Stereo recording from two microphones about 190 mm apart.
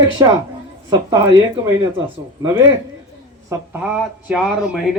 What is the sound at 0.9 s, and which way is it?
Speech, 20° right (ahead or behind).